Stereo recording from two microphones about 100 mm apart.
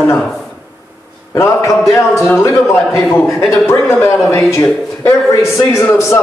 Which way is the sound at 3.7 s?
25° left (ahead or behind).